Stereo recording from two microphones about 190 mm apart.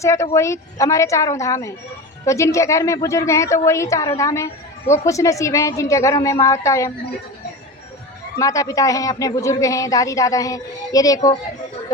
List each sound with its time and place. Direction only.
0.0 s a woman's voice: 15° left (ahead or behind)
8.4 s a woman's voice: 15° left (ahead or behind)